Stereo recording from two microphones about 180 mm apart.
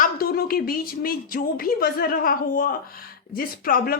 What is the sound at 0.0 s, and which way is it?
Speech, 55° left (ahead or behind).